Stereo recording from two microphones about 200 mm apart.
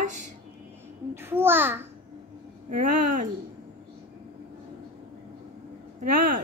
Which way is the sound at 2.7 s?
40° right (ahead or behind).